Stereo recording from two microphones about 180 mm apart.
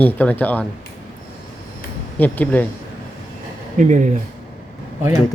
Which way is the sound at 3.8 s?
45° right (ahead or behind).